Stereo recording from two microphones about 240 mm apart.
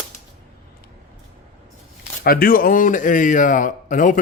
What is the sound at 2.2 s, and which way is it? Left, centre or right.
Speech, left.